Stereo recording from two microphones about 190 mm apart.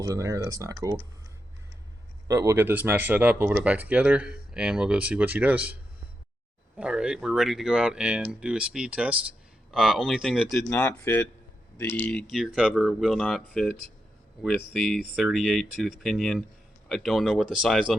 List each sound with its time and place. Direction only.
0.0 s speech: 15° right (ahead or behind)
2.2 s speech: 15° right (ahead or behind)
6.7 s speech: 5° right (ahead or behind)
15.1 s speech: centre (ahead or behind)